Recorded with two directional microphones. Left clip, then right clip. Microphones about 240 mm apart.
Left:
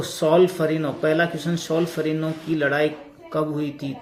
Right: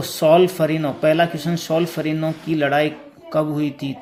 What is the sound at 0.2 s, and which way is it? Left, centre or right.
Speech, right.